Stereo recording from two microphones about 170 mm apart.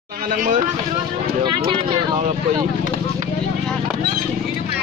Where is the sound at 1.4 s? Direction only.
30° right (ahead or behind).